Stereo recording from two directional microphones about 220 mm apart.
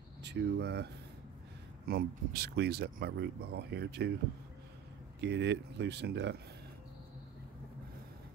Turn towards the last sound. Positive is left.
turn(degrees=-50)  # may be behind; listen again after turning